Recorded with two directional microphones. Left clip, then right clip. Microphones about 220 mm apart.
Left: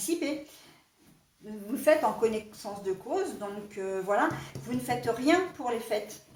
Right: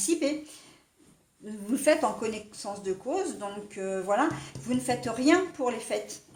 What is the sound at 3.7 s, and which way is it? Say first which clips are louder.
A woman's voice: right 1 dB; 40° right (ahead or behind).